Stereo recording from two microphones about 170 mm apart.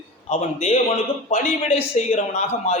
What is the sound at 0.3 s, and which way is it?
A man's voice, 40° left (ahead or behind).